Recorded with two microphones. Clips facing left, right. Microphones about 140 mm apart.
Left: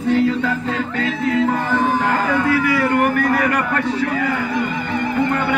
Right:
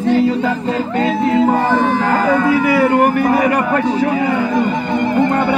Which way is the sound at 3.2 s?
25° right (ahead or behind).